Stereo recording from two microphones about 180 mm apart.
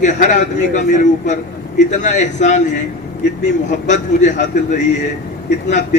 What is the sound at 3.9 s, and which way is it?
A man's voice, 40° left (ahead or behind).